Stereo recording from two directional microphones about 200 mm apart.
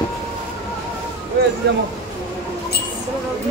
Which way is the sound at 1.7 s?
60° right (ahead or behind).